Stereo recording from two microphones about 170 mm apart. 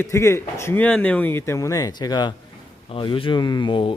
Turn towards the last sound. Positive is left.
turn(degrees=30)  # may be behind; listen again after turning